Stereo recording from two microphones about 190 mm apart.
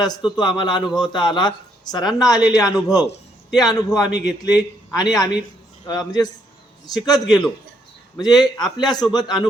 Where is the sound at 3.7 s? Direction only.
20° left (ahead or behind).